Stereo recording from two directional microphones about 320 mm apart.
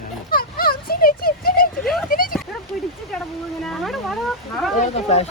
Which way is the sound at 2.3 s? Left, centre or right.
Centre.